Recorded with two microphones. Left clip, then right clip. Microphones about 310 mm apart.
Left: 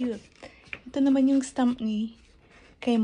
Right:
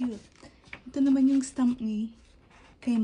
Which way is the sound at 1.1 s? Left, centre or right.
Centre.